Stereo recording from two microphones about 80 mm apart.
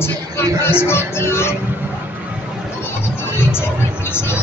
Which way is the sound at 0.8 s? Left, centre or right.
Left.